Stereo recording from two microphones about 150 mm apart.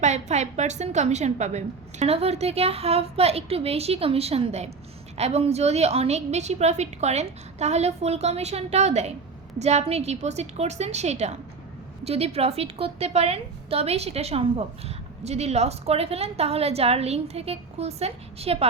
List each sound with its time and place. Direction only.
0.0 s a woman's voice: 50° right (ahead or behind)